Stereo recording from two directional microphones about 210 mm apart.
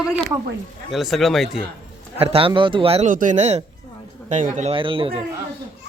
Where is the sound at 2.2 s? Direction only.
25° right (ahead or behind).